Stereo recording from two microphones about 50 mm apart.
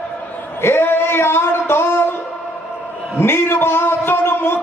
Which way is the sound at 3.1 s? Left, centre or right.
Left.